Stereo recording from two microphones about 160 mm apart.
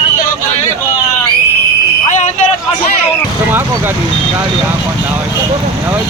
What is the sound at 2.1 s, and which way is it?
Fire alarm, 50° left (ahead or behind).